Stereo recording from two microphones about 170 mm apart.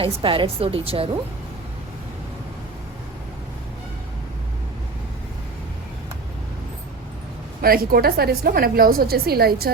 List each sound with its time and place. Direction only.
0.0 s a woman's voice: 30° right (ahead or behind)
7.6 s a woman's voice: 60° right (ahead or behind)